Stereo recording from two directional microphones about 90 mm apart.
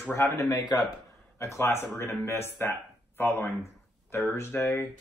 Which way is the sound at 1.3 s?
30° left (ahead or behind).